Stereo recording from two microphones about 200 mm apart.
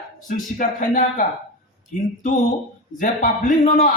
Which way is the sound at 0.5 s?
40° left (ahead or behind).